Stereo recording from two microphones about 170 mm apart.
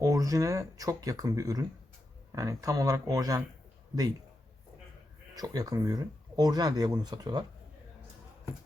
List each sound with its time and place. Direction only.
0.0 s speech: 20° right (ahead or behind)
5.3 s speech: 20° right (ahead or behind)